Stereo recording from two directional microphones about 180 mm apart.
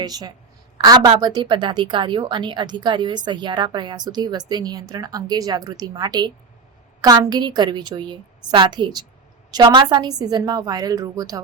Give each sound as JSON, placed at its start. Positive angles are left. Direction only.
{"t": 0.0, "sound": "a woman's voice", "side_deg": -20}